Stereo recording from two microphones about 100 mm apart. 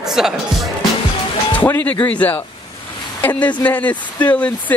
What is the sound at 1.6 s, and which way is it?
Speech, 20° left (ahead or behind).